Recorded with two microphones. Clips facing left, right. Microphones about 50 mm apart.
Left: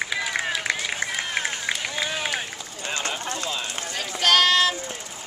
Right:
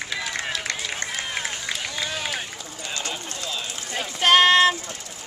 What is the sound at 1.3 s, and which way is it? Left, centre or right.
Run, centre.